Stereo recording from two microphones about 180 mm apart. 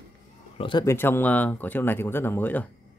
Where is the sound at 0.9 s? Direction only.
10° left (ahead or behind).